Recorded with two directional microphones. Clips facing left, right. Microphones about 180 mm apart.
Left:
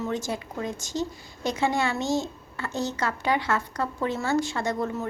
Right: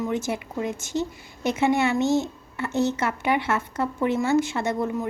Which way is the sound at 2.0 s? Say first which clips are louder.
Right 4 dB; 60° right (ahead or behind).